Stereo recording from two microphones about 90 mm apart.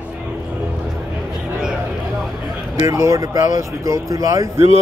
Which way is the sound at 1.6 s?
5° right (ahead or behind).